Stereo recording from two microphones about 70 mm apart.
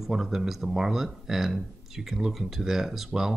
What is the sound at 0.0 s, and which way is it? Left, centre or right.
Speech, centre.